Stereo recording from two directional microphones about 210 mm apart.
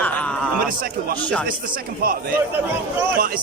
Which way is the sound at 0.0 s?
5° left (ahead or behind).